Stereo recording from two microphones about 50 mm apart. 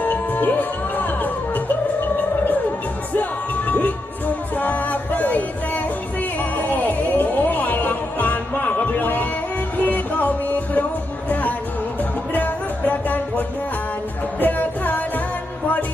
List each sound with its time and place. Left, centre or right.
0.0 s music: left
3.1 s music: left
14.4 s music: left